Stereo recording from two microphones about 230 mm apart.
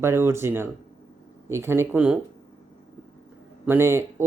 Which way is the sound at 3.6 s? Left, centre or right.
Centre.